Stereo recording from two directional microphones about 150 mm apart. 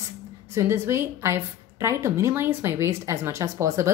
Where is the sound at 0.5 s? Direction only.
20° right (ahead or behind).